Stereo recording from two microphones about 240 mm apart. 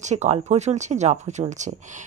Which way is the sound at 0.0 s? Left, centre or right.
Right.